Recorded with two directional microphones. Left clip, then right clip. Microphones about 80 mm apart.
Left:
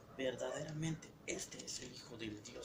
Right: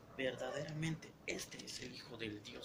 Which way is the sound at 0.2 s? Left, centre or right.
Right.